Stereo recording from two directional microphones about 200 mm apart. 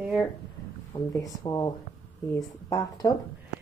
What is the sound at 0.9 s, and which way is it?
Speech, 15° left (ahead or behind).